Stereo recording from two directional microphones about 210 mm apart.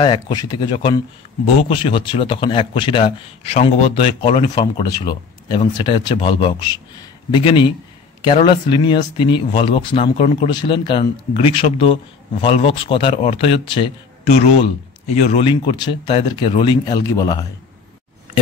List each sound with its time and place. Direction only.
0.0 s speech: 20° left (ahead or behind)